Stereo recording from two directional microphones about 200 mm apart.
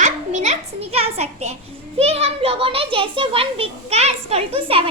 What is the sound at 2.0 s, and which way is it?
A child's voice, 30° right (ahead or behind).